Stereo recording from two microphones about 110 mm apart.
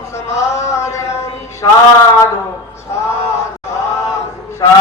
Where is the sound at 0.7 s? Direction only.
25° left (ahead or behind).